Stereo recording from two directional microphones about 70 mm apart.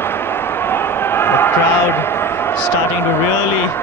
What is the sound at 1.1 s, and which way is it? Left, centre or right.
Music, left.